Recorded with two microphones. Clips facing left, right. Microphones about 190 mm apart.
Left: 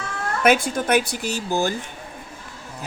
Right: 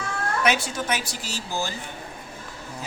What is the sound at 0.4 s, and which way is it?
Speech, 50° left (ahead or behind).